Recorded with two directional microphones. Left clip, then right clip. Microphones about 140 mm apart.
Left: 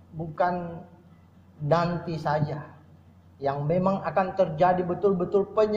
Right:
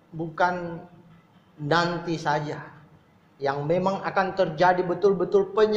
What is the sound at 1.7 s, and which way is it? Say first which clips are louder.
A man's voice: right 1 dB; 30° right (ahead or behind).